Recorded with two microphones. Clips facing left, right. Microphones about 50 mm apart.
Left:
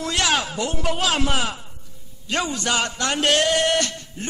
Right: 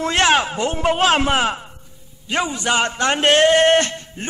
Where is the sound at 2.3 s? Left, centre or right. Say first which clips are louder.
Right 3 dB; centre.